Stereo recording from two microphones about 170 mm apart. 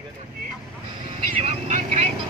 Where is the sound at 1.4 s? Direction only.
45° right (ahead or behind).